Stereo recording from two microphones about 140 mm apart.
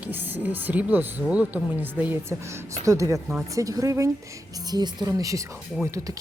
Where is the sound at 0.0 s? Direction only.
15° right (ahead or behind).